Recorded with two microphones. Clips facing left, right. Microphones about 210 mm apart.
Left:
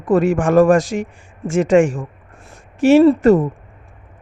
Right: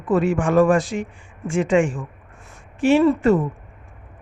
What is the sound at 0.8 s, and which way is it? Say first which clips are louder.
Speech: left 4 dB; 90° left.